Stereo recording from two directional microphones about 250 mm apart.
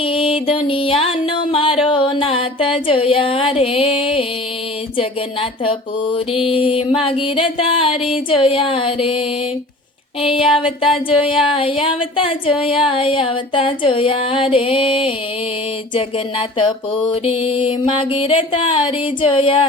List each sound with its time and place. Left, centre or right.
0.0 s music: left